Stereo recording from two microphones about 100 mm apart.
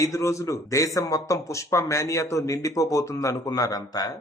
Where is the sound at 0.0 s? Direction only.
30° left (ahead or behind).